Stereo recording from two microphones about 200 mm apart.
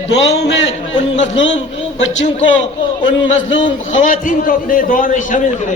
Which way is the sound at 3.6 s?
40° left (ahead or behind).